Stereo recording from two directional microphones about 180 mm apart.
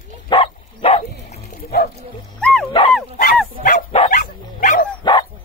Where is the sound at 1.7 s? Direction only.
60° left (ahead or behind).